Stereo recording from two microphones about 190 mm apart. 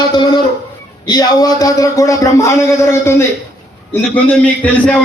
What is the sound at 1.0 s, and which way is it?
A man's voice, 20° left (ahead or behind).